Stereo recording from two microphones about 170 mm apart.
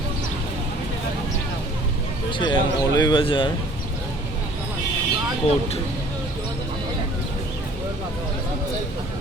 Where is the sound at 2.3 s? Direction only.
30° left (ahead or behind).